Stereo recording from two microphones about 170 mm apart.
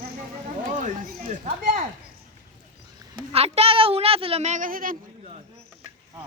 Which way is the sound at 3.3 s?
35° right (ahead or behind).